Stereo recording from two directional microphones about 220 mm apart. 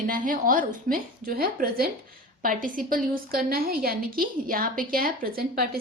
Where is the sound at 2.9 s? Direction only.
40° right (ahead or behind).